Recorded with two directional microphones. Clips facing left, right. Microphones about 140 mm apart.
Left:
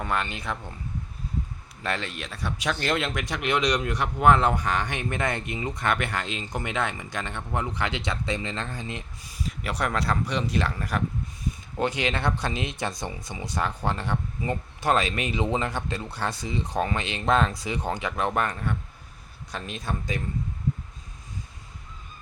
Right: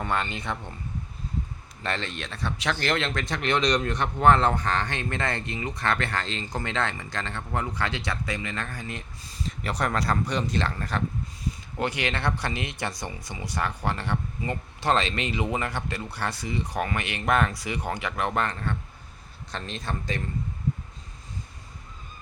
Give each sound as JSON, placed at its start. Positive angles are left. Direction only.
{"t": 0.0, "sound": "speech", "side_deg": 5}
{"t": 1.8, "sound": "a man's voice", "side_deg": 5}